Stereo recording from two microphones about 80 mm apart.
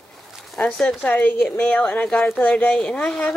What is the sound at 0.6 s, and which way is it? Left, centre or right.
Speech, centre.